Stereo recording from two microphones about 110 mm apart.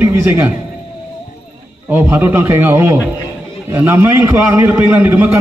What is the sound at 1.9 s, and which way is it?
A man's voice, 15° right (ahead or behind).